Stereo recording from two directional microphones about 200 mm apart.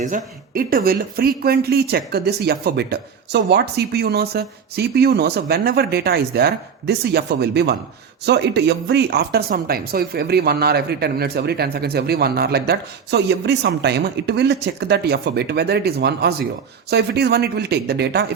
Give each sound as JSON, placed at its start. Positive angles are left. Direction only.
{"t": 0.0, "sound": "speech", "side_deg": -45}